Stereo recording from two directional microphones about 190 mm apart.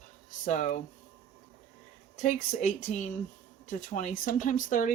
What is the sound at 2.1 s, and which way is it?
Speech, 40° left (ahead or behind).